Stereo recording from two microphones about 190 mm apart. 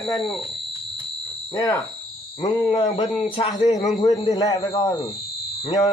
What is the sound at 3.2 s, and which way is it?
Speech, 35° left (ahead or behind).